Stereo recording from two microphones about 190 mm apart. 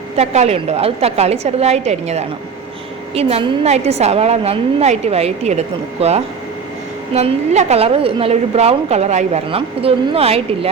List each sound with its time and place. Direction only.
0.2 s a woman's voice: 35° right (ahead or behind)